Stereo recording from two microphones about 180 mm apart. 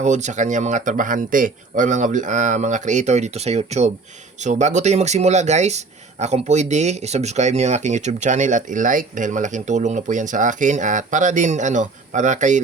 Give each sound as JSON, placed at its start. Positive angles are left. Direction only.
{"t": 0.0, "sound": "speech", "side_deg": -40}